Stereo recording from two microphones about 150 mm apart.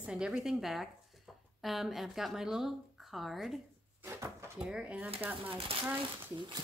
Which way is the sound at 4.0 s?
15° right (ahead or behind).